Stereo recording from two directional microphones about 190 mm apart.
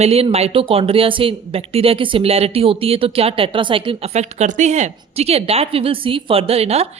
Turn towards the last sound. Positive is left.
turn(degrees=-35)  # may be behind; listen again after turning